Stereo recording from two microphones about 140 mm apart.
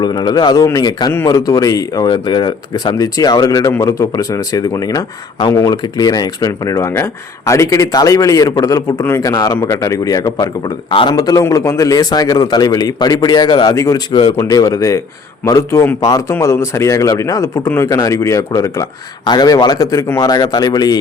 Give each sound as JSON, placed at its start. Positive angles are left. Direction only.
{"t": 0.0, "sound": "a man's voice", "side_deg": 30}